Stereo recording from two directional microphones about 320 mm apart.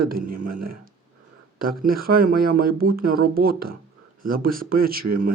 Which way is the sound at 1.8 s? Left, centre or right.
Right.